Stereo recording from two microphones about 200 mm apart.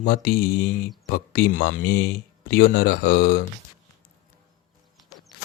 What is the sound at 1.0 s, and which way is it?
Speech, 50° left (ahead or behind).